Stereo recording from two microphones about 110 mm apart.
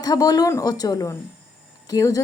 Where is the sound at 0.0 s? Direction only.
35° left (ahead or behind).